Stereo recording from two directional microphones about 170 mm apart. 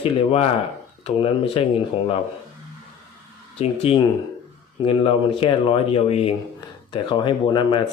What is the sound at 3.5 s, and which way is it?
Speech, 35° left (ahead or behind).